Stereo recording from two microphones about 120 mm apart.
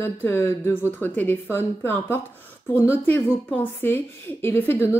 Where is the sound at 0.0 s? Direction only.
20° left (ahead or behind).